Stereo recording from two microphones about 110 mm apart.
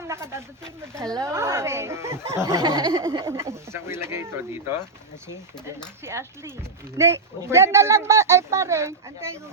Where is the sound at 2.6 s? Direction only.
50° right (ahead or behind).